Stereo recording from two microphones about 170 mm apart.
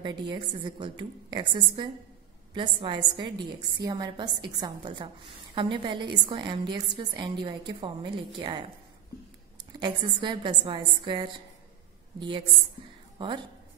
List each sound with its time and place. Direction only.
0.0 s a woman's voice: 25° right (ahead or behind)
9.8 s a woman's voice: 25° right (ahead or behind)